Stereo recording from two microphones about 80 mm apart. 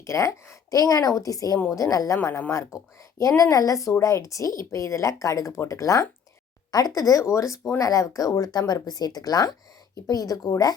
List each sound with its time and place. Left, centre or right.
0.0 s a woman's voice: left
2.1 s a woman's voice: left
6.7 s a woman's voice: left